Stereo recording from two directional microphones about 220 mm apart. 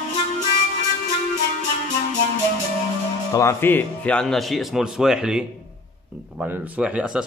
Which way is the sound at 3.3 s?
15° left (ahead or behind).